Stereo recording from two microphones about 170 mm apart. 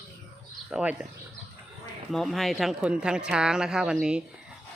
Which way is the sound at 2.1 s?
Centre (ahead or behind).